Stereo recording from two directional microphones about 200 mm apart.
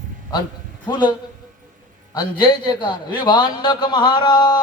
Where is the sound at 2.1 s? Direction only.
20° left (ahead or behind).